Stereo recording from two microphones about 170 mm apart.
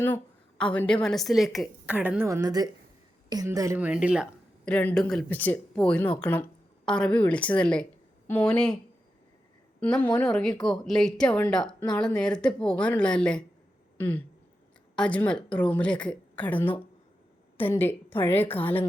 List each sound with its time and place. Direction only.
0.6 s a woman's voice: 5° left (ahead or behind); by 3.8 s 20° right (ahead or behind)
3.8 s a woman's voice: 5° right (ahead or behind)
4.6 s a woman's voice: 10° left (ahead or behind)
9.8 s a woman's voice: 5° left (ahead or behind)